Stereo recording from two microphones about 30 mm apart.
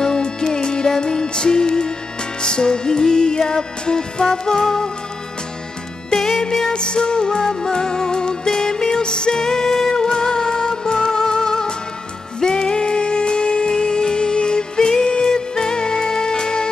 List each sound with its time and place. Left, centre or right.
0.0 s music: left
6.7 s music: left